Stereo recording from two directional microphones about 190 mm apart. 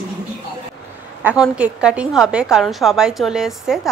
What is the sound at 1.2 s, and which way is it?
A woman's voice, 5° right (ahead or behind).